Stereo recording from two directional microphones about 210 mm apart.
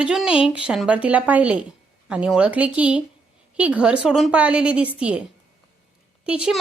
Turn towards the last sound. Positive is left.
turn(degrees=-5)  # may be behind; listen again after turning